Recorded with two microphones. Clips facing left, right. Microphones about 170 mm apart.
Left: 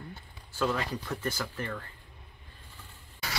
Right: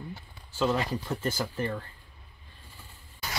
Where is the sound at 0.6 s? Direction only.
20° right (ahead or behind).